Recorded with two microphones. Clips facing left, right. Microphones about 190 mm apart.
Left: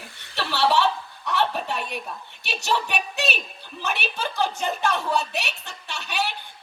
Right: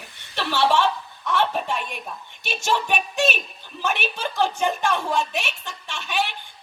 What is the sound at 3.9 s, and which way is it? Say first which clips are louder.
Speech: right 2 dB; 40° left (ahead or behind).